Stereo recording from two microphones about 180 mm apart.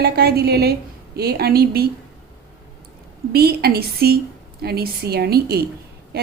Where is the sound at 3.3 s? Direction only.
60° right (ahead or behind).